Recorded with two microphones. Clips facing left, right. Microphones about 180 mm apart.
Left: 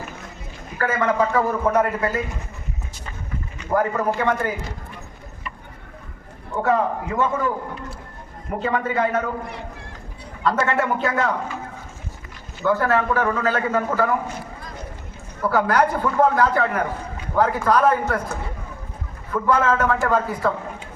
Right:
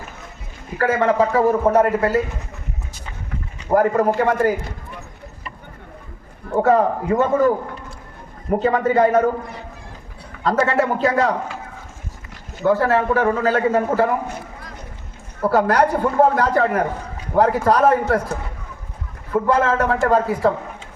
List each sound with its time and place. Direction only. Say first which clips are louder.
0.8 s a man's voice: right 4 dB; 35° right (ahead or behind)
3.6 s a man's voice: right 5 dB; 35° right (ahead or behind)
6.5 s a man's voice: right 5 dB; 35° right (ahead or behind)
8.6 s a man's voice: right 5 dB; 40° right (ahead or behind)
10.4 s a man's voice: right 3 dB; 40° right (ahead or behind)
12.6 s a man's voice: right 3 dB; 35° right (ahead or behind)
15.4 s a man's voice: right 3 dB; 35° right (ahead or behind)